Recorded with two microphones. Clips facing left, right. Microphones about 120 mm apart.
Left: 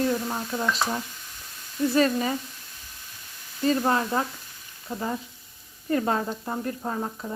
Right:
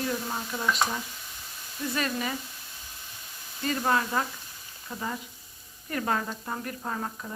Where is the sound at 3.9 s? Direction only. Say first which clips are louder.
Left 2 dB; 30° left (ahead or behind).